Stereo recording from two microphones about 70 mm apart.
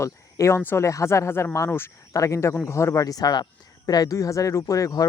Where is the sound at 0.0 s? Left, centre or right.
Left.